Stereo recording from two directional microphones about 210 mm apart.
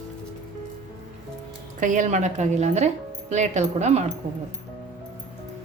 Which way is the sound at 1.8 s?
35° right (ahead or behind).